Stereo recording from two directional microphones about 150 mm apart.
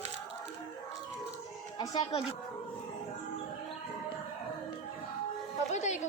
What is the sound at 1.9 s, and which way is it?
Speech, 40° left (ahead or behind).